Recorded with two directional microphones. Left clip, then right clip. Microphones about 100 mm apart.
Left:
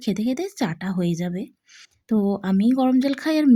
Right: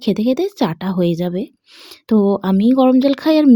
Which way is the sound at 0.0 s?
40° right (ahead or behind).